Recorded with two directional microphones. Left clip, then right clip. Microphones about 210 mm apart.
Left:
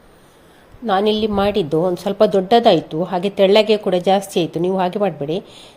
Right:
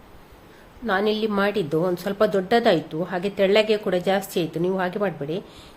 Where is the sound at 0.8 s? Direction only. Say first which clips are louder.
Left 6 dB; 20° left (ahead or behind).